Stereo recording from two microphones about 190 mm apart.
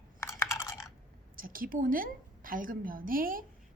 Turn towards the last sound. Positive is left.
turn(degrees=-45)  # may be behind; listen again after turning